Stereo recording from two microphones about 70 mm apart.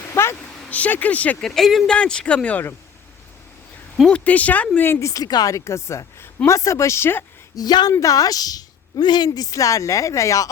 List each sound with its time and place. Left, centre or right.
0.1 s a sound: left
0.7 s speech: left
1.4 s speech: centre
1.9 s speech: centre
4.1 s speech: left
4.9 s a woman's voice: left
5.2 s a woman's voice: left
7.5 s speech: left
7.9 s a woman's voice: left